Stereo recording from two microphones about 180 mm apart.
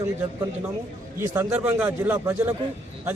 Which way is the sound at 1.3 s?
10° right (ahead or behind).